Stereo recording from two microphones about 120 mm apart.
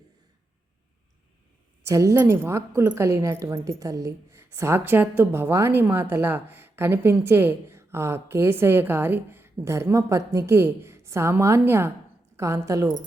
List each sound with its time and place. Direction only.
1.8 s a woman's voice: 25° right (ahead or behind)